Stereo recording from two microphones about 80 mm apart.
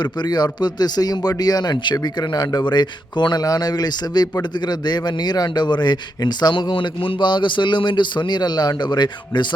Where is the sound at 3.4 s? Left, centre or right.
Left.